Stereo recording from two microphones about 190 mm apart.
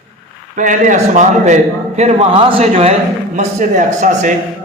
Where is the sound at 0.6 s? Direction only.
40° right (ahead or behind).